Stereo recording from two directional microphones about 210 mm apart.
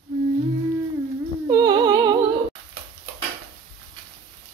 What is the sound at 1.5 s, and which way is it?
Music, 20° right (ahead or behind).